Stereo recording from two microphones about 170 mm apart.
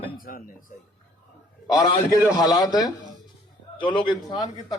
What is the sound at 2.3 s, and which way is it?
A man's voice, 20° left (ahead or behind).